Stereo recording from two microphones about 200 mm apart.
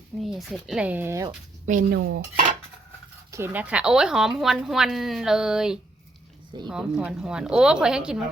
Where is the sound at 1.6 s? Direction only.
40° right (ahead or behind).